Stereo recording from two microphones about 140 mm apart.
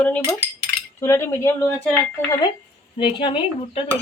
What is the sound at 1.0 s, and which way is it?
Speech, 20° left (ahead or behind).